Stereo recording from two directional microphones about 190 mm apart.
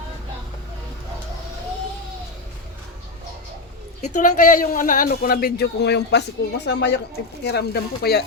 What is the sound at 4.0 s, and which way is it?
A man's voice, 40° left (ahead or behind).